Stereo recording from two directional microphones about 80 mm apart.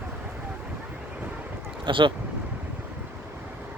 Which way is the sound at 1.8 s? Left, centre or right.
Right.